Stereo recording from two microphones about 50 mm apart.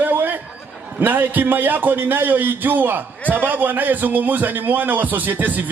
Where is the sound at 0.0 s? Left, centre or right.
Right.